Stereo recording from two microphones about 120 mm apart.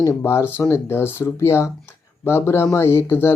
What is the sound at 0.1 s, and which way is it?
Speech, 20° left (ahead or behind).